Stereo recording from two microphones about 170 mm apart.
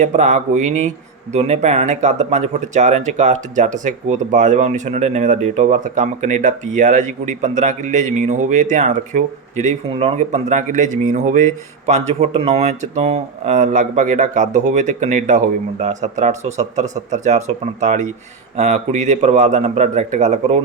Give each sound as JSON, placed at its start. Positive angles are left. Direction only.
{"t": 0.0, "sound": "a man's voice", "side_deg": -45}